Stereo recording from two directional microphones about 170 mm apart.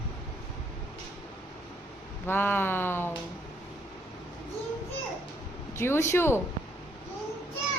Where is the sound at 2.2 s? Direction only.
10° left (ahead or behind).